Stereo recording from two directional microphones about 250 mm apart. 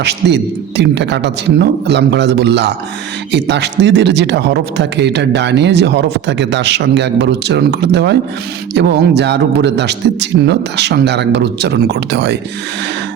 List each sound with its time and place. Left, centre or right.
0.0 s a man's voice: right